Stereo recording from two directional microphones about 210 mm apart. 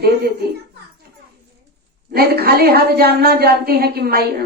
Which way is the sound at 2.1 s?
50° right (ahead or behind).